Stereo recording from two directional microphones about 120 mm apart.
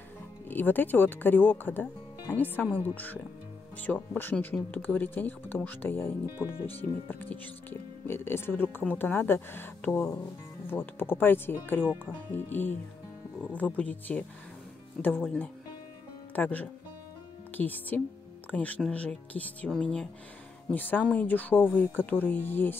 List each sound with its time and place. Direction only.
0.5 s speech: 15° left (ahead or behind)